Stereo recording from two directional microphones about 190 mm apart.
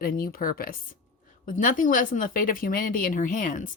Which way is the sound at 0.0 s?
50° left (ahead or behind).